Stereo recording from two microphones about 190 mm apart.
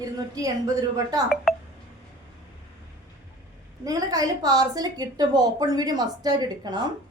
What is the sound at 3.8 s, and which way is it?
A woman's voice, 20° right (ahead or behind).